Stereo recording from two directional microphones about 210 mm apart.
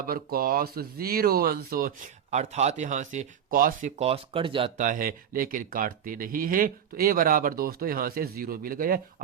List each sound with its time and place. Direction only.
0.0 s speech: 45° right (ahead or behind); by 4.9 s 25° right (ahead or behind)
4.9 s speech: 40° right (ahead or behind)